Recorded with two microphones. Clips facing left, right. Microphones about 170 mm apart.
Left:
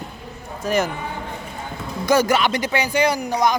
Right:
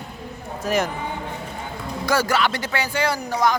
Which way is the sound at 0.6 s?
Centre (ahead or behind).